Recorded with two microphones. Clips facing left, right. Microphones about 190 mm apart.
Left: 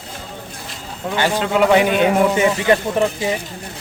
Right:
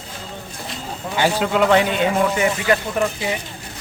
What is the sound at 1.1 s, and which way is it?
Speech, 10° right (ahead or behind).